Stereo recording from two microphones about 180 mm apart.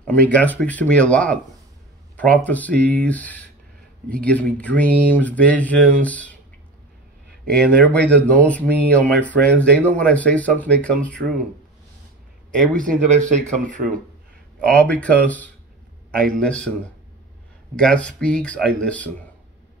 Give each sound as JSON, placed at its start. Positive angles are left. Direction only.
{"t": 0.0, "sound": "speech", "side_deg": 5}
{"t": 7.6, "sound": "speech", "side_deg": 5}
{"t": 13.1, "sound": "speech", "side_deg": -40}
{"t": 14.7, "sound": "speech", "side_deg": 5}
{"t": 17.7, "sound": "speech", "side_deg": 5}